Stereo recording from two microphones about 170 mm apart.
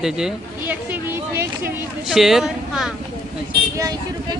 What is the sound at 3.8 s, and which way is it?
Vehicle, 20° right (ahead or behind).